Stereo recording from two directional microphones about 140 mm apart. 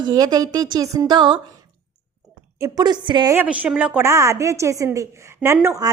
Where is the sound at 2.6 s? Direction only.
30° right (ahead or behind).